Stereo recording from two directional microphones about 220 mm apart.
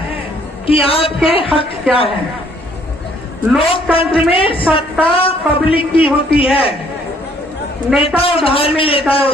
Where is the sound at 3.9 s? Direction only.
25° left (ahead or behind).